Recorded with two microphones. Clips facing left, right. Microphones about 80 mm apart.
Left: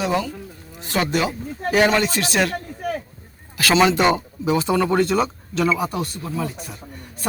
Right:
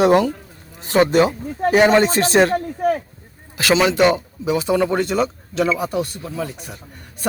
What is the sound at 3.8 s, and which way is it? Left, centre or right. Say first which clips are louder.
Speech: even; centre.